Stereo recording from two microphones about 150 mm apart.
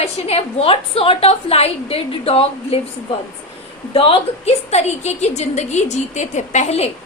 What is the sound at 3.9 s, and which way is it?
A woman's voice, 40° left (ahead or behind).